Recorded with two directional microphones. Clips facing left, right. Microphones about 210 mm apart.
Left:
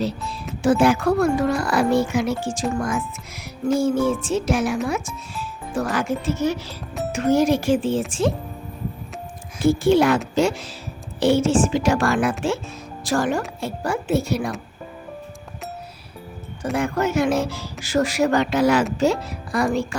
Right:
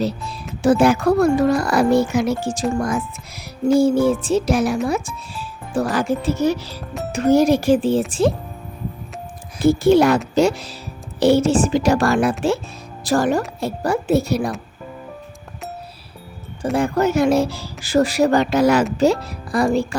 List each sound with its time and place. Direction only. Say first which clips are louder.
0.6 s speech: right 3 dB; 40° right (ahead or behind)
9.6 s speech: right 3 dB; 40° right (ahead or behind)
16.7 s speech: right 3 dB; 35° right (ahead or behind)